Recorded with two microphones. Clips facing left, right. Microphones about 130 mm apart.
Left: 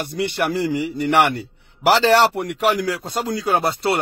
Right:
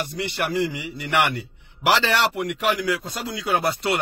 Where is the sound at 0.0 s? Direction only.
45° left (ahead or behind).